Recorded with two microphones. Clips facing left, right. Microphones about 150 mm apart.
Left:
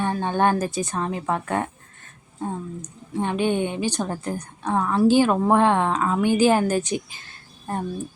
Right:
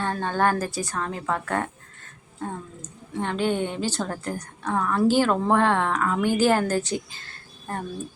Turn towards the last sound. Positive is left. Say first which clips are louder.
# left 4 dB
turn(degrees=15)  # may be behind; listen again after turning